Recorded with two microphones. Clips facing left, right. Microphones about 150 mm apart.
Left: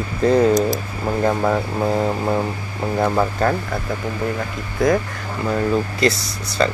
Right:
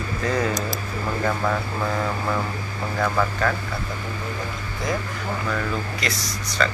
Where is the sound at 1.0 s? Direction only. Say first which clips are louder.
Left 6 dB; 35° left (ahead or behind).